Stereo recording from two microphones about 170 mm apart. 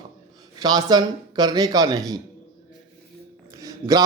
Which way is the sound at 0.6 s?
25° right (ahead or behind).